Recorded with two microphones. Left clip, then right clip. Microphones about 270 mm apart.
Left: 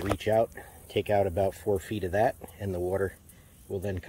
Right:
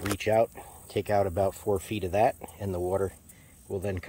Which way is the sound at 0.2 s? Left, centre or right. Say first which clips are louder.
Right 3 dB; centre.